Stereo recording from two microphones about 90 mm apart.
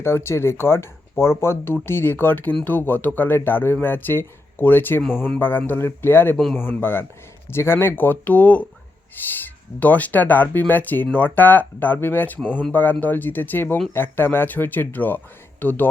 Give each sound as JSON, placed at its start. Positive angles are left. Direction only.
{"t": 0.0, "sound": "speech", "side_deg": 30}